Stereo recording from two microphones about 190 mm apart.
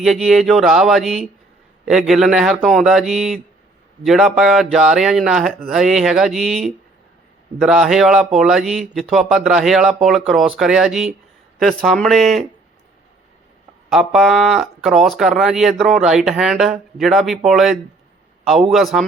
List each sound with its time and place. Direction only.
0.0 s speech: centre (ahead or behind)
13.9 s speech: centre (ahead or behind)